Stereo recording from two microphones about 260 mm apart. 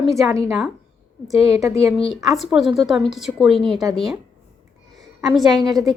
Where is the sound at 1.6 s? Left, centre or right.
Centre.